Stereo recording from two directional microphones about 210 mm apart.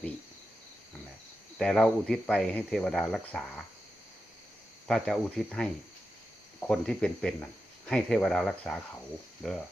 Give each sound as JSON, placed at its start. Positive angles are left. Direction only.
{"t": 1.5, "sound": "speech", "side_deg": 5}
{"t": 4.9, "sound": "speech", "side_deg": 0}